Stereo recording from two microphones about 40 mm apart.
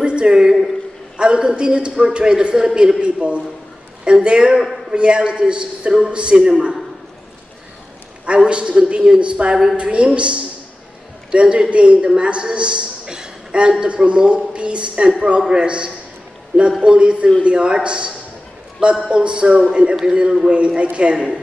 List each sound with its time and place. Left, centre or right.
0.0 s a sound: right
0.3 s a woman's voice: centre
8.5 s a man's voice: right